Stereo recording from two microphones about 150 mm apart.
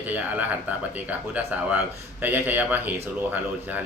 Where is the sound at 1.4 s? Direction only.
10° right (ahead or behind).